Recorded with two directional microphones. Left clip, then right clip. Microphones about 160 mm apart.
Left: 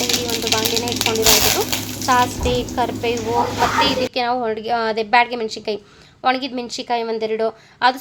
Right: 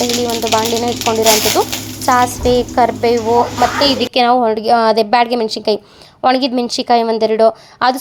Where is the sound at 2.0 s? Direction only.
45° right (ahead or behind).